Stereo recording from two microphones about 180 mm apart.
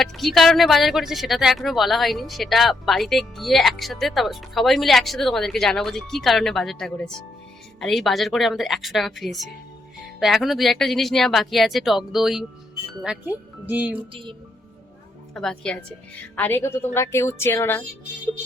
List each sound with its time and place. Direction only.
0.0 s speech: centre (ahead or behind)
13.7 s music: 10° right (ahead or behind)
14.1 s a woman's voice: 30° right (ahead or behind)
15.4 s a woman's voice: 5° left (ahead or behind)